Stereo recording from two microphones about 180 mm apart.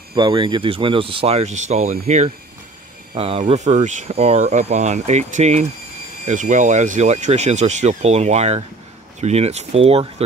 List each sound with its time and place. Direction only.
0.1 s speech: 25° right (ahead or behind)